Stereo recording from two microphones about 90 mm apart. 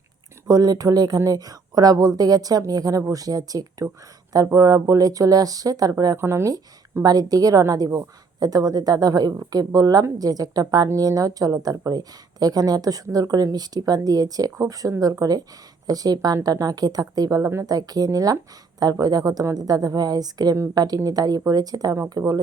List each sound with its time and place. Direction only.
0.4 s speech: 45° right (ahead or behind)
6.1 s speech: 30° right (ahead or behind)
7.0 s speech: 45° right (ahead or behind)